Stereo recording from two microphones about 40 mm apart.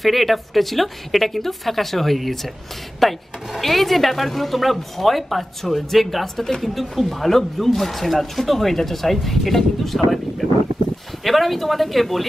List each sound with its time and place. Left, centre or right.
0.0 s speech: centre
11.2 s speech: centre